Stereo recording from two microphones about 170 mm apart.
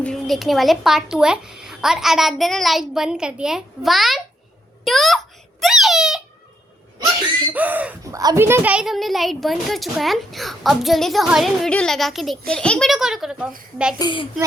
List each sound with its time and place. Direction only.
0.0 s a child's voice: centre (ahead or behind)
4.9 s a sound: centre (ahead or behind)
7.5 s speech: 10° right (ahead or behind)
8.1 s a child's voice: 20° right (ahead or behind); by 13.5 s 5° right (ahead or behind)
14.0 s a child's voice: 30° left (ahead or behind)